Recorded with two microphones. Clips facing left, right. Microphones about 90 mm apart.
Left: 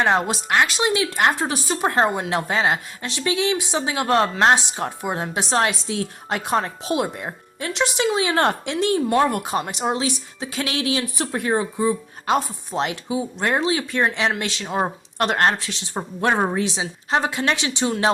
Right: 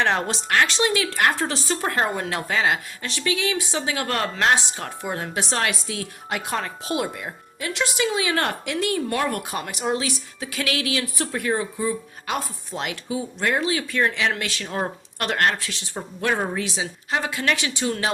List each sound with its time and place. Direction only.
0.0 s speech: 15° left (ahead or behind)
16.0 s speech: 35° left (ahead or behind)